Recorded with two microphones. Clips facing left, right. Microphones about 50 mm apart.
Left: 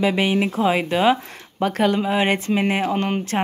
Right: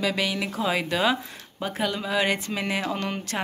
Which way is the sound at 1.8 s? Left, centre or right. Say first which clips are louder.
Left 5 dB; left.